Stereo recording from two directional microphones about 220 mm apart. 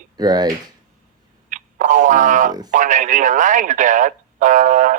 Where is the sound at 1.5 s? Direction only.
35° right (ahead or behind).